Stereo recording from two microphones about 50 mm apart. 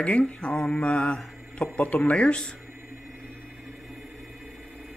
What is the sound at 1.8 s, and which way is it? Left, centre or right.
Speech, left.